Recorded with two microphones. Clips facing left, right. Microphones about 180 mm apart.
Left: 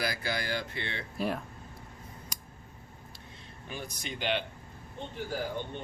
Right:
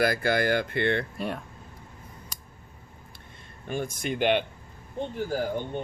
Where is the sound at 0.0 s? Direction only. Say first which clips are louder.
Right 10 dB; 55° right (ahead or behind).